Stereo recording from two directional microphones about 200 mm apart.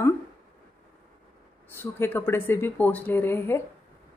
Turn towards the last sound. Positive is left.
turn(degrees=10)  # may be behind; listen again after turning